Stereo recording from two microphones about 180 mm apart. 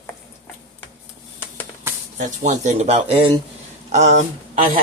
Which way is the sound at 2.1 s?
45° right (ahead or behind).